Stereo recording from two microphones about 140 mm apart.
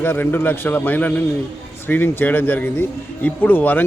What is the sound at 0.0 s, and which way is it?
A man's voice, 15° left (ahead or behind).